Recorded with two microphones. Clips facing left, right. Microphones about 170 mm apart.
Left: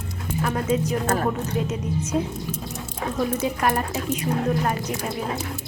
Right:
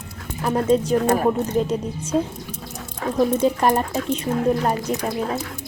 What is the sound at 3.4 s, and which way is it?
Speech, 30° right (ahead or behind).